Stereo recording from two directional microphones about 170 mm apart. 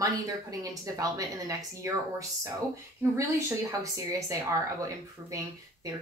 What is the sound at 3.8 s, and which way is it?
A woman's voice, 20° right (ahead or behind).